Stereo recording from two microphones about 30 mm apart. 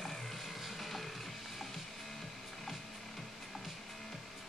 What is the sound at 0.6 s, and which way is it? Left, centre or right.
Music, centre.